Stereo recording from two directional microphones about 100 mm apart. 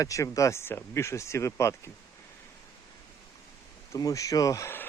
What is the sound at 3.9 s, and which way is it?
Speech, 35° left (ahead or behind).